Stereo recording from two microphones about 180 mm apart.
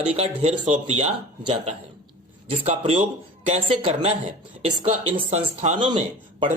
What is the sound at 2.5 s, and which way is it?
Speech, 35° right (ahead or behind).